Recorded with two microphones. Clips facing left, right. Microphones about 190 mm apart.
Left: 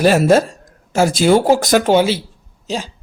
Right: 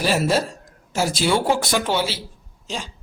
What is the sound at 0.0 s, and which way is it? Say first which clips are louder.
Speech: left 8 dB; 50° left (ahead or behind).